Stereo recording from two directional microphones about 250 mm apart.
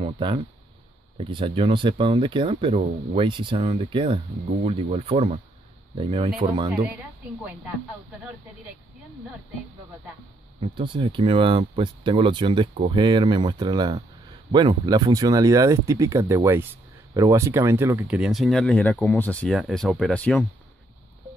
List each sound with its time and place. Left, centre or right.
0.0 s speech: centre
10.6 s speech: centre